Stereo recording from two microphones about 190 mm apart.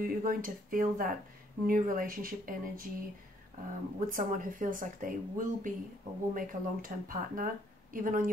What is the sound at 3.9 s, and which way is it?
Speech, 45° right (ahead or behind).